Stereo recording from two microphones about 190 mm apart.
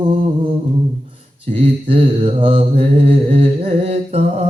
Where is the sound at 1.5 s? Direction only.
30° right (ahead or behind).